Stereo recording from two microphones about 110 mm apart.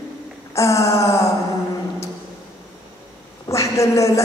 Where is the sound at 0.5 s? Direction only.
30° left (ahead or behind).